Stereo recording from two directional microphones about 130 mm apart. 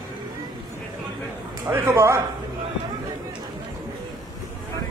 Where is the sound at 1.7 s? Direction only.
20° right (ahead or behind).